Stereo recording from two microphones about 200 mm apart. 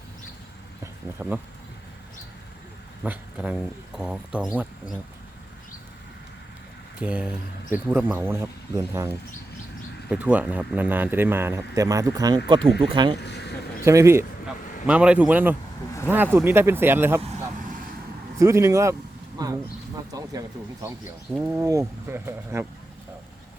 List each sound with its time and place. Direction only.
1.2 s speech: 10° right (ahead or behind)
3.0 s speech: 5° right (ahead or behind)
7.0 s speech: 5° right (ahead or behind); by 13.1 s 25° right (ahead or behind)
13.2 s a sound: 55° left (ahead or behind)
13.8 s speech: 15° right (ahead or behind)
17.2 s vehicle: 30° right (ahead or behind)
18.3 s speech: 15° right (ahead or behind)